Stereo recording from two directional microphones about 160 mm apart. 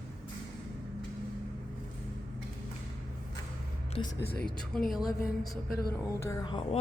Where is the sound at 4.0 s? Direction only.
30° left (ahead or behind).